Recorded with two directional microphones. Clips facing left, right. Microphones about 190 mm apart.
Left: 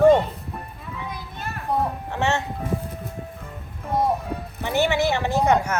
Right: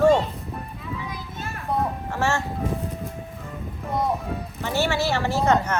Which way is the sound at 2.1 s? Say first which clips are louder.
Left 1 dB; 20° left (ahead or behind).